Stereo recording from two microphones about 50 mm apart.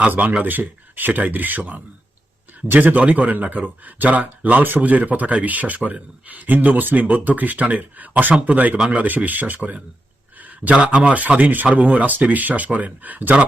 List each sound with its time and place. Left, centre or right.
0.1 s speech: right